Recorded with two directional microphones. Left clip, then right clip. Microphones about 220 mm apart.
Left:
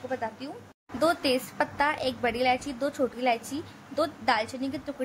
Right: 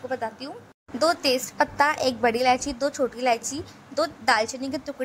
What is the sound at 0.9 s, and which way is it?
A woman's voice, 10° right (ahead or behind).